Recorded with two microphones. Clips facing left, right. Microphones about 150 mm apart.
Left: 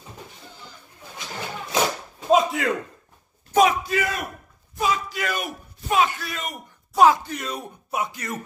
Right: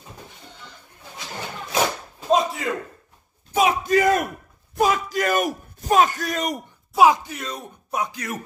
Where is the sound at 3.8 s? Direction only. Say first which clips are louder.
Right 8 dB; 45° right (ahead or behind).